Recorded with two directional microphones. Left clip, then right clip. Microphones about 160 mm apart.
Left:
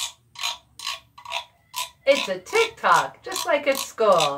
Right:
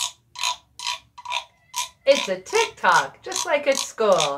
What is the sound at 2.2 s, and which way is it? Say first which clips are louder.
Speech: even; 5° right (ahead or behind).